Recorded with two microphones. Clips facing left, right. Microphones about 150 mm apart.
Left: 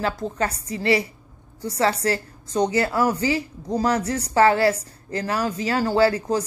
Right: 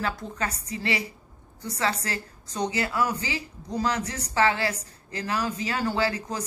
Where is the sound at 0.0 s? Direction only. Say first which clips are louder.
Left 6 dB; 35° left (ahead or behind).